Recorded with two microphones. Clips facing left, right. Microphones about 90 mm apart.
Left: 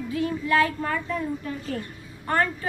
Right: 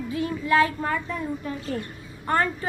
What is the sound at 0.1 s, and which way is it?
Child singing, 20° right (ahead or behind).